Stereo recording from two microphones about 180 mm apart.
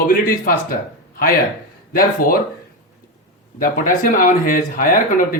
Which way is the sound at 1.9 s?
50° left (ahead or behind).